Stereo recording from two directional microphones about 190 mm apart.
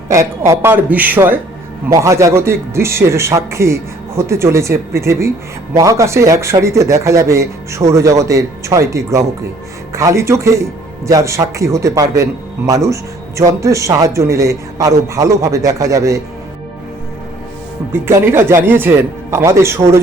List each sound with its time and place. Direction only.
0.1 s speech: 15° right (ahead or behind)
17.9 s speech: 10° right (ahead or behind)